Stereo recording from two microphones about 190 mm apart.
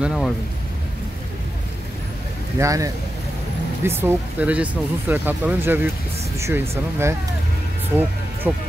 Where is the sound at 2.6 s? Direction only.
15° right (ahead or behind).